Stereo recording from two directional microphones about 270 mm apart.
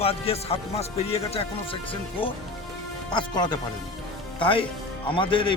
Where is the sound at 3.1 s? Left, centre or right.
Centre.